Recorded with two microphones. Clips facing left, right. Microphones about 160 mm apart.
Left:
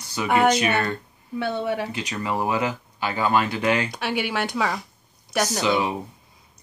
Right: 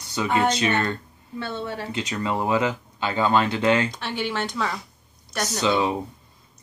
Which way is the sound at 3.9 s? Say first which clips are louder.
Left 2 dB; 10° left (ahead or behind).